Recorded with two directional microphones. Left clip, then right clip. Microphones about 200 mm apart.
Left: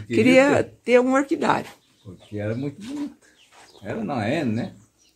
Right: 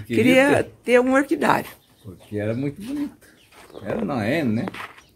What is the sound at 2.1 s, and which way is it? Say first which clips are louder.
Speech: right 2 dB; 60° right (ahead or behind).